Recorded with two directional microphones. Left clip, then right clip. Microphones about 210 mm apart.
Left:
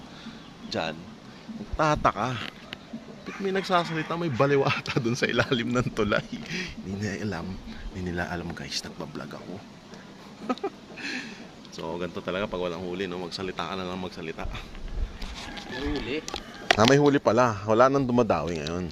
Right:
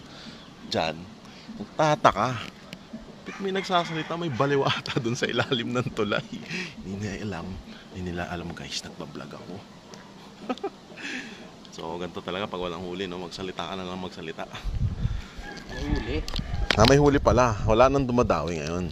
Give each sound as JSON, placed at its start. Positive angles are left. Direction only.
{"t": 0.7, "sound": "speech", "side_deg": -40}
{"t": 1.7, "sound": "a man's voice", "side_deg": -10}
{"t": 2.0, "sound": "a man's voice", "side_deg": -45}
{"t": 3.4, "sound": "speech", "side_deg": 5}
{"t": 10.4, "sound": "a sound", "side_deg": 5}
{"t": 11.8, "sound": "speech", "side_deg": 0}
{"t": 16.7, "sound": "a man's voice", "side_deg": -10}